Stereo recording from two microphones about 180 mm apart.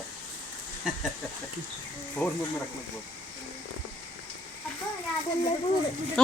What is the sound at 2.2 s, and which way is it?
Speech, 10° left (ahead or behind).